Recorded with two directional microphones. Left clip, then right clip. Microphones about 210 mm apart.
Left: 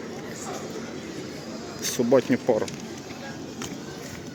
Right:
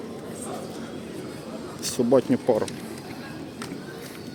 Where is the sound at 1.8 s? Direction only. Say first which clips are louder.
Even; 15° right (ahead or behind).